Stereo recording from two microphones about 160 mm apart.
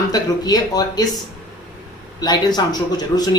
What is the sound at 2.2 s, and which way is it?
Speech, 25° left (ahead or behind).